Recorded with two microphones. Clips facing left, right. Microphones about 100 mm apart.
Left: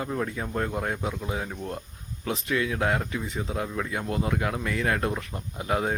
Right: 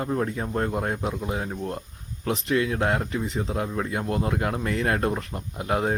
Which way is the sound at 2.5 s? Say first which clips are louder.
Right 2 dB; 40° right (ahead or behind).